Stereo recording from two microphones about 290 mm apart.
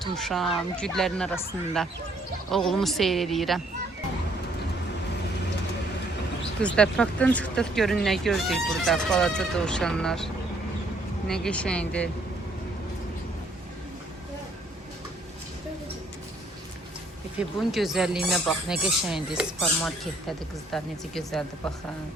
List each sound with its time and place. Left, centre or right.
0.0 s speech: centre
6.6 s speech: centre
11.3 s speech: centre
17.3 s speech: centre